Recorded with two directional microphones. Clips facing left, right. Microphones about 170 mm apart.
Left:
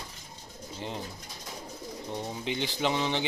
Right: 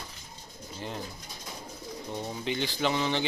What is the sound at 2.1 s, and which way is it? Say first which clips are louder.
Speech: right 1 dB; 15° left (ahead or behind).